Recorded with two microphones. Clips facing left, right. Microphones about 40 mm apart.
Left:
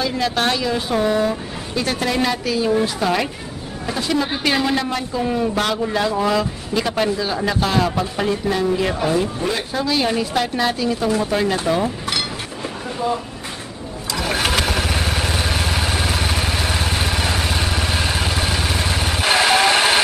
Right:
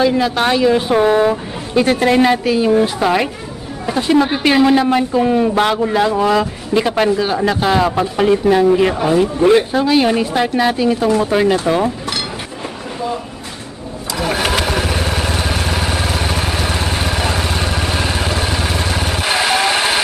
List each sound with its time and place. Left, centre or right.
0.0 s a woman's voice: centre
14.1 s vehicle: centre